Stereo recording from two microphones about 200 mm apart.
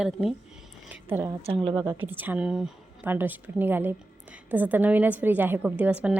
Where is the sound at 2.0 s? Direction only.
10° right (ahead or behind).